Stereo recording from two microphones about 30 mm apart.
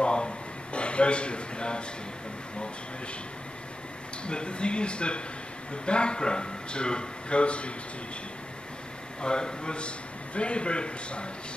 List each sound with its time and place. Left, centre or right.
0.0 s a sound: left
0.7 s a man's voice: left
4.3 s a man's voice: left
9.2 s a man's voice: left